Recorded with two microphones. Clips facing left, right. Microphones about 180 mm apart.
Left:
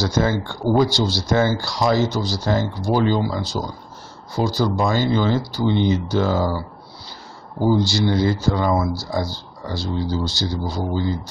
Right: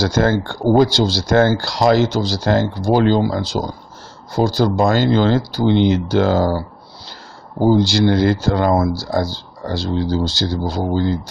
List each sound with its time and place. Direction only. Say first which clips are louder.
0.0 s speech: right 4 dB; 75° right (ahead or behind); by 3.4 s 60° right (ahead or behind)
4.6 s speech: right 4 dB; 70° right (ahead or behind)
7.7 s speech: right 4 dB; 85° right